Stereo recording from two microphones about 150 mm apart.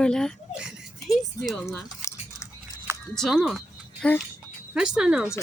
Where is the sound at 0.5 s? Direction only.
5° right (ahead or behind).